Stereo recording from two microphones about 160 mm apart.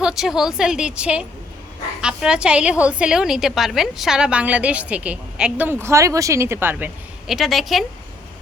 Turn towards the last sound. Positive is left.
turn(degrees=0)  # may be behind; listen again after turning